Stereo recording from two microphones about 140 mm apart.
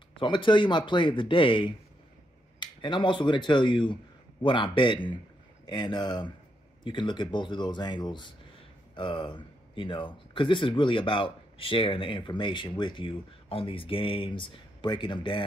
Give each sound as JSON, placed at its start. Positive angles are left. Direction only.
{"t": 0.1, "sound": "speech", "side_deg": 35}